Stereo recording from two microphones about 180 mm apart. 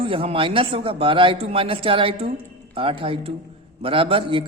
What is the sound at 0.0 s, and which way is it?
A man's voice, 30° right (ahead or behind).